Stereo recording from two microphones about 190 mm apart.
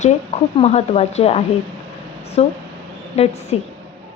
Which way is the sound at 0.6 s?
35° left (ahead or behind).